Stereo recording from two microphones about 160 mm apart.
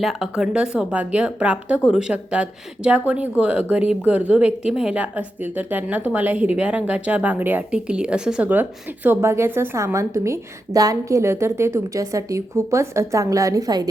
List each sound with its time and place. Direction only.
0.0 s a woman's voice: centre (ahead or behind); by 13.8 s 25° right (ahead or behind)